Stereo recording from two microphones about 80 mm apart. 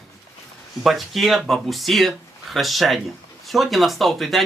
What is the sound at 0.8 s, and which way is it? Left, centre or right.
Speech, centre.